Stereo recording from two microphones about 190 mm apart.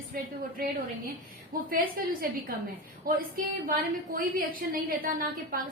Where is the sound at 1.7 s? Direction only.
50° right (ahead or behind).